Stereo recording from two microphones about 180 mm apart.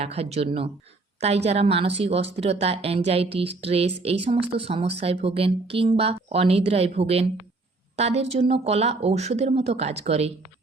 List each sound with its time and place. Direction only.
0.0 s speech: 35° right (ahead or behind)